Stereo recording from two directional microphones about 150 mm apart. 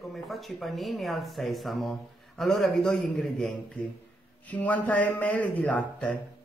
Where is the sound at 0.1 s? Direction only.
Centre (ahead or behind).